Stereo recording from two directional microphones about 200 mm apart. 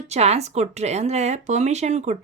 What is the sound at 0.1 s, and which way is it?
Speech, 35° right (ahead or behind).